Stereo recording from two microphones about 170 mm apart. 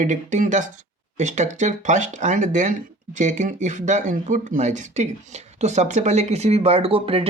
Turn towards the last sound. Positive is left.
turn(degrees=-35)  # may be behind; listen again after turning